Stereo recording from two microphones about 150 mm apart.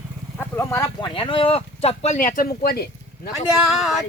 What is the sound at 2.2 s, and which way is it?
Speech, 65° left (ahead or behind).